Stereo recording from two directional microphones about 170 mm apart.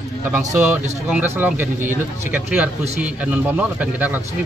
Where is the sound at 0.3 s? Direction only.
10° right (ahead or behind).